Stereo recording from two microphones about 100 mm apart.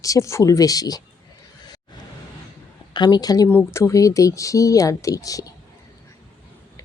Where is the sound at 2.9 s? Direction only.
45° left (ahead or behind).